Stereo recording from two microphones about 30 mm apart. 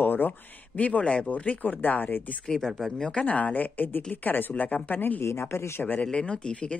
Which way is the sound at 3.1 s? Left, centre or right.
Left.